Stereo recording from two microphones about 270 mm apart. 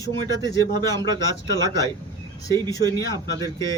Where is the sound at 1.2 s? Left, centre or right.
Centre.